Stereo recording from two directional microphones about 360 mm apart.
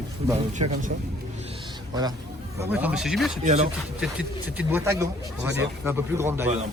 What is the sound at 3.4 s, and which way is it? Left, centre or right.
Speech, centre.